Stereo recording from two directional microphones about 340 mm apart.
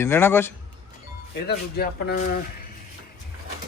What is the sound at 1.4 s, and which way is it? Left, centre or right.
Speech, left.